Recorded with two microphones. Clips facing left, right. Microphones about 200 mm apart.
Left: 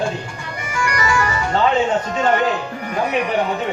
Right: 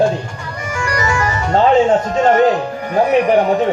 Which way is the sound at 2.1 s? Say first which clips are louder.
Right 6 dB; 35° right (ahead or behind).